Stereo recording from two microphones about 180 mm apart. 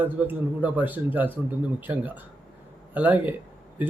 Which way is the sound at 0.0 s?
10° right (ahead or behind).